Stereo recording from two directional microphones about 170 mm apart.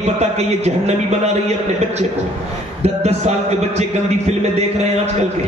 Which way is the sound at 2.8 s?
40° right (ahead or behind).